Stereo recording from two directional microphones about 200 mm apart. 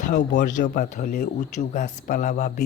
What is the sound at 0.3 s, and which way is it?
Speech, 40° left (ahead or behind).